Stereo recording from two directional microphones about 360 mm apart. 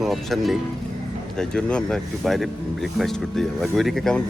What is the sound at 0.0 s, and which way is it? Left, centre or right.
Speech, centre.